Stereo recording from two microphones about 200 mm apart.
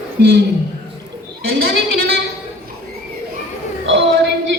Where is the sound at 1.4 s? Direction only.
50° right (ahead or behind).